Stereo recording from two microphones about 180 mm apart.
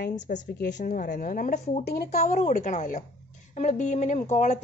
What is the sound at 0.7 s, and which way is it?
A woman's voice, 45° left (ahead or behind).